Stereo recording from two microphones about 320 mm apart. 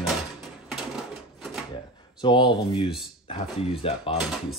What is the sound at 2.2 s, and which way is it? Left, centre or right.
Speech, centre.